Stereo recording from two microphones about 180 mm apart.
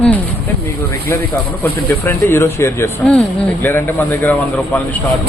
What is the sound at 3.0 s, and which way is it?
Speech, 5° left (ahead or behind).